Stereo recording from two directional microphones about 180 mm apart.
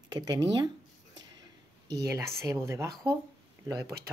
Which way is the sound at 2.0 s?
15° right (ahead or behind).